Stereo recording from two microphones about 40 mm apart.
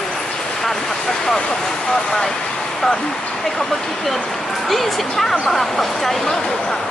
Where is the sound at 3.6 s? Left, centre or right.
Centre.